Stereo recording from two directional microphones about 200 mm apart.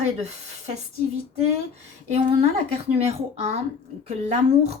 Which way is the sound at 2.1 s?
30° right (ahead or behind).